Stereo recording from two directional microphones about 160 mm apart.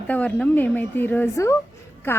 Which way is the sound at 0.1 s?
10° left (ahead or behind).